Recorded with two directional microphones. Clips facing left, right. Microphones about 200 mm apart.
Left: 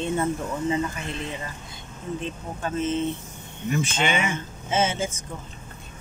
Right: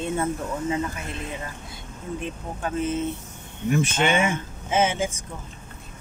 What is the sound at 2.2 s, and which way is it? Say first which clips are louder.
Speech: even; 10° right (ahead or behind).